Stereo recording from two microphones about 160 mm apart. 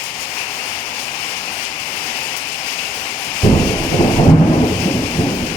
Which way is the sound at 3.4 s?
15° left (ahead or behind).